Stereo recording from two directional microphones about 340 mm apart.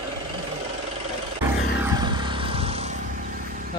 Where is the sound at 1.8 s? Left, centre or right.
Centre.